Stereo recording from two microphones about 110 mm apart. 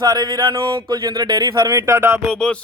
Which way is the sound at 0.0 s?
40° right (ahead or behind).